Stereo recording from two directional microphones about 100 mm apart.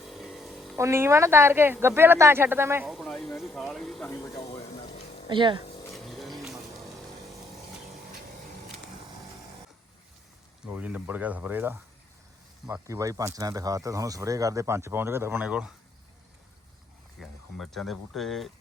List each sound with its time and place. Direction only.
0.0 s a sound: centre (ahead or behind)
0.8 s speech: 25° right (ahead or behind)
2.8 s speech: centre (ahead or behind)
4.1 s speech: 30° left (ahead or behind)
4.4 s a sound: 75° left (ahead or behind)
5.3 s speech: 55° right (ahead or behind)
5.9 s music: centre (ahead or behind)
10.7 s speech: 15° right (ahead or behind)
12.9 s speech: 35° right (ahead or behind)
15.4 s speech: 10° right (ahead or behind)
17.2 s speech: centre (ahead or behind)